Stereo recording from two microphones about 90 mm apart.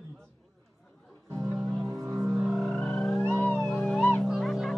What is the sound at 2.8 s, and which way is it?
Theremin, 10° left (ahead or behind).